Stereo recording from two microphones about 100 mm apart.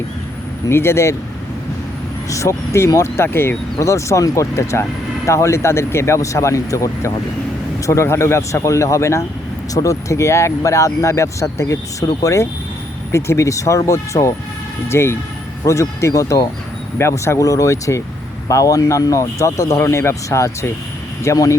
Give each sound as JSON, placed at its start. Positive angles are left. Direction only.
{"t": 0.7, "sound": "speech", "side_deg": 25}
{"t": 2.3, "sound": "speech", "side_deg": 30}